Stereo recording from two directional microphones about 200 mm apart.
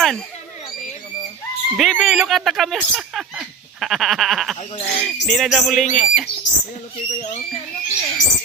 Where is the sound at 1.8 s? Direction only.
Centre (ahead or behind).